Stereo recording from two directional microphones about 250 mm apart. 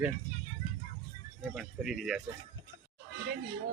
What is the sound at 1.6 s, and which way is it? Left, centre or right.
Speech, centre.